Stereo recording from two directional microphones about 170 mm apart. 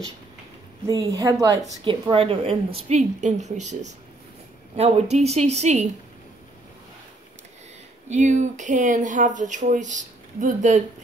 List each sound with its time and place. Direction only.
0.8 s a woman's voice: 20° right (ahead or behind)
1.9 s a woman's voice: 30° right (ahead or behind)
2.9 s a woman's voice: 45° right (ahead or behind)
8.1 s speech: 45° right (ahead or behind)